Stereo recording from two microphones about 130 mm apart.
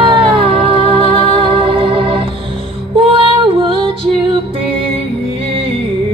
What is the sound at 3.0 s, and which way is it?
Music, 40° right (ahead or behind).